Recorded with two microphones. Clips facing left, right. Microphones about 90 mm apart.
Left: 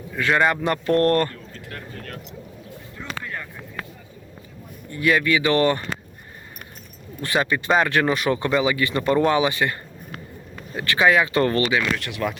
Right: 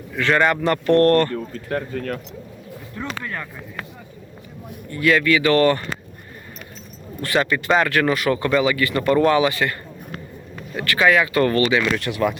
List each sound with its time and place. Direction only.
0.1 s speech: 10° left (ahead or behind)
1.3 s speech: 45° right (ahead or behind)
2.9 s a sound: 75° right (ahead or behind)
4.9 s speech: 20° left (ahead or behind)
7.2 s speech: 20° left (ahead or behind)
10.8 s speech: 20° left (ahead or behind)
11.9 s speech: centre (ahead or behind)